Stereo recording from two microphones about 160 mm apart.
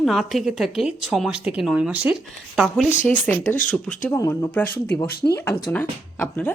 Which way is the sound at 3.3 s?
10° left (ahead or behind).